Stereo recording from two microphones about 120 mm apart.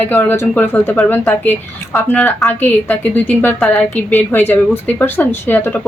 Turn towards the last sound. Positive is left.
turn(degrees=15)  # may be behind; listen again after turning